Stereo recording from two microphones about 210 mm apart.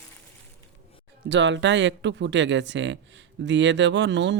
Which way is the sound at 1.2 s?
60° right (ahead or behind).